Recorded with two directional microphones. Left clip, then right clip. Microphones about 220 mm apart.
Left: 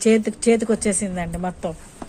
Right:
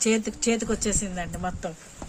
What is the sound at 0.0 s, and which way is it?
Speech, 15° left (ahead or behind).